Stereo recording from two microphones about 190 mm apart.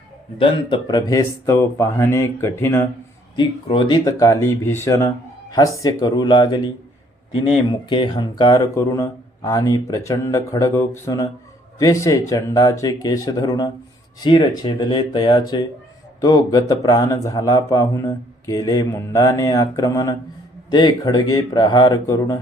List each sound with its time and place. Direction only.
0.3 s speech: 20° left (ahead or behind)
3.3 s speech: 25° left (ahead or behind)